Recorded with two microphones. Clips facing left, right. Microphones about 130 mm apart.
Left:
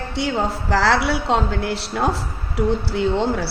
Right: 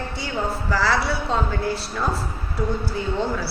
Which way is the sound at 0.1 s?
85° left.